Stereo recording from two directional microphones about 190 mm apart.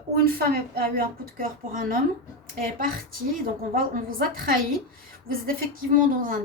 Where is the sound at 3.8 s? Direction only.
50° right (ahead or behind).